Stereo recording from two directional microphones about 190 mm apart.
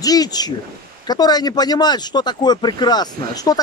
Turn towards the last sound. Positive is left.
turn(degrees=20)  # may be behind; listen again after turning